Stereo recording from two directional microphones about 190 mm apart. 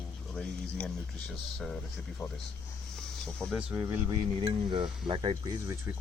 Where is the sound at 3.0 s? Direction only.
5° left (ahead or behind).